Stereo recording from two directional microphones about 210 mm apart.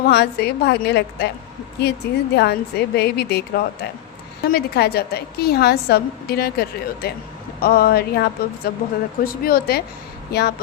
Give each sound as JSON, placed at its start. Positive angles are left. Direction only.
{"t": 0.0, "sound": "a woman's voice", "side_deg": 50}